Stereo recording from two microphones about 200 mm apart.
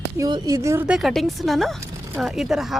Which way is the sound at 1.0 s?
Centre (ahead or behind).